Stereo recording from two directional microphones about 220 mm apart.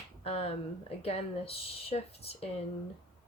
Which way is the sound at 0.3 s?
25° left (ahead or behind).